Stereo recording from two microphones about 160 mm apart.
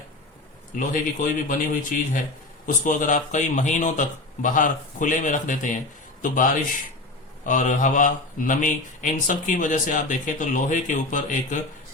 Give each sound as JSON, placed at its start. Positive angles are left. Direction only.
{"t": 0.8, "sound": "speech", "side_deg": 55}